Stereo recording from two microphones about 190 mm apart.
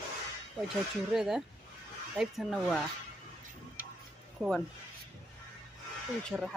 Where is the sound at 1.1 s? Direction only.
Centre (ahead or behind).